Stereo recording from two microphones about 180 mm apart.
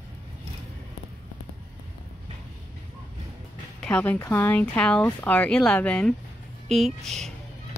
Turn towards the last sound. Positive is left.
turn(degrees=0)  # may be behind; listen again after turning